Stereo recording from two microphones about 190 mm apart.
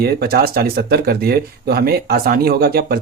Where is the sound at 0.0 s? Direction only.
55° right (ahead or behind).